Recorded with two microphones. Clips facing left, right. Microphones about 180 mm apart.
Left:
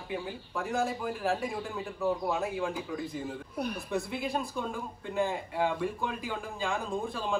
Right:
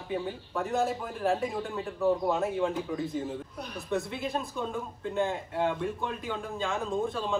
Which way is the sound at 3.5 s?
55° left (ahead or behind).